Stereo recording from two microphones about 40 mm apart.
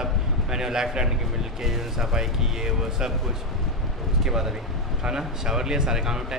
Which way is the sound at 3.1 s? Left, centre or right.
Centre.